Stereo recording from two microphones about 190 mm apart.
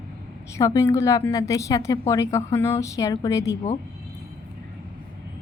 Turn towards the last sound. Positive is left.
turn(degrees=15)  # may be behind; listen again after turning